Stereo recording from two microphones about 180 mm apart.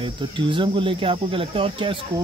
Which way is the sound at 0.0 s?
30° right (ahead or behind).